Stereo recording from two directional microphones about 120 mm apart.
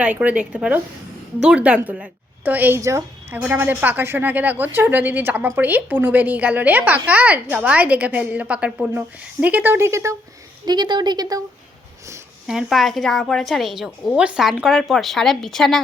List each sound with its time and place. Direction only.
0.0 s a woman's voice: 10° right (ahead or behind)
3.3 s a woman's voice: 15° right (ahead or behind)
10.7 s speech: 40° right (ahead or behind)
12.5 s a woman's voice: 5° right (ahead or behind)